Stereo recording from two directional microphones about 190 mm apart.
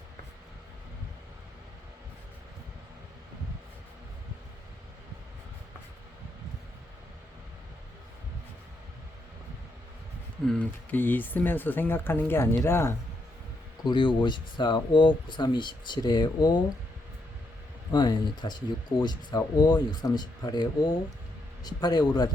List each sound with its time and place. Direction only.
10.4 s speech: 5° left (ahead or behind)
13.8 s speech: 25° left (ahead or behind)
17.9 s speech: 20° left (ahead or behind)